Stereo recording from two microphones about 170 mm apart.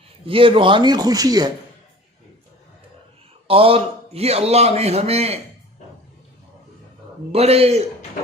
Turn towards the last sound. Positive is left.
turn(degrees=-35)  # may be behind; listen again after turning